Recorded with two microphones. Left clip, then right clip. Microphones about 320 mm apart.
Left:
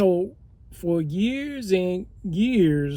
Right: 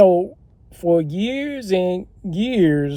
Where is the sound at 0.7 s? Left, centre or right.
Right.